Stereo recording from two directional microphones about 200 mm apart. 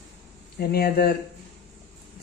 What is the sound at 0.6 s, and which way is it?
Speech, 50° left (ahead or behind).